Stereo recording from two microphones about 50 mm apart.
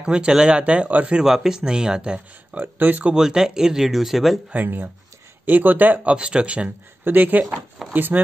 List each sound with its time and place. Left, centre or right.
0.0 s speech: centre
1.2 s speech: centre
2.5 s speech: right
3.2 s speech: centre
4.5 s speech: right
6.0 s speech: right
7.1 s speech: right